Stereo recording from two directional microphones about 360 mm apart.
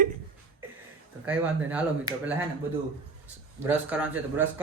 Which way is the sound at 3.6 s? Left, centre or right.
Centre.